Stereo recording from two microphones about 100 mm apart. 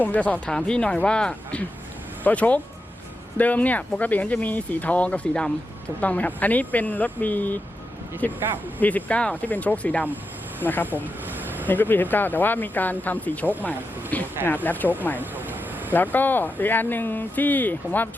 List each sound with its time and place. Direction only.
0.0 s speech: 15° left (ahead or behind)
11.7 s speech: 20° left (ahead or behind)
15.2 s vehicle: 20° right (ahead or behind)
15.9 s speech: 20° left (ahead or behind)